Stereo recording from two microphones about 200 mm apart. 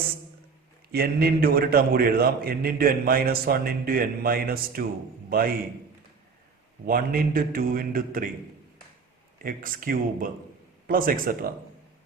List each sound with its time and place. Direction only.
0.9 s a man's voice: 50° right (ahead or behind)
6.8 s a man's voice: 45° right (ahead or behind)
9.4 s a man's voice: 45° right (ahead or behind)